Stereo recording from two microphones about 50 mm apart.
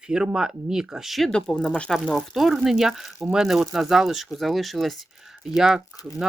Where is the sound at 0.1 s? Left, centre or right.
Centre.